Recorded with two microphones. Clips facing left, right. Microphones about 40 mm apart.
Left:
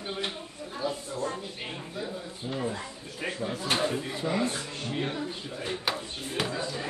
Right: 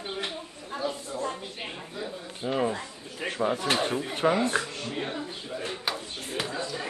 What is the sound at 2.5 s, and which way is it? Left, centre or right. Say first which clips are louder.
Speech: right 5 dB; right.